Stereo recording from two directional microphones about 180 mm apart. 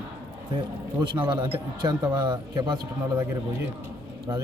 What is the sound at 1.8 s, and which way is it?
A man's voice, 25° right (ahead or behind).